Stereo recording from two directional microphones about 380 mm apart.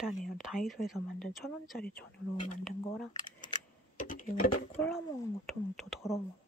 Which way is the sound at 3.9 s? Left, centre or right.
Left.